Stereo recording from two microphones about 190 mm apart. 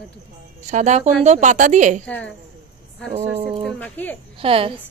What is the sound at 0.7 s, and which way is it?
A woman's voice, 40° right (ahead or behind).